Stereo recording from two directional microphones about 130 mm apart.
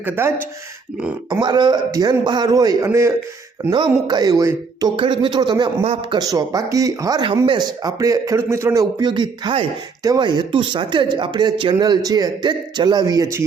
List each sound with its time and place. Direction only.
0.0 s speech: 20° right (ahead or behind)
1.3 s speech: 35° right (ahead or behind)
3.7 s speech: 35° right (ahead or behind)
4.9 s speech: 40° right (ahead or behind)
5.8 s a man's voice: 50° right (ahead or behind)
6.1 s a man's voice: 30° right (ahead or behind)